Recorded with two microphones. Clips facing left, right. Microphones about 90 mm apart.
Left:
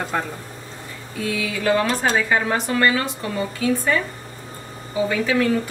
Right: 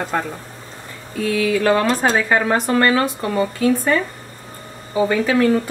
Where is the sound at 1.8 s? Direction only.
50° right (ahead or behind).